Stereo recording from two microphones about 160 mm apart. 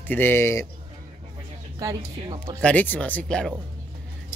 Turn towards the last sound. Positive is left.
turn(degrees=5)  # may be behind; listen again after turning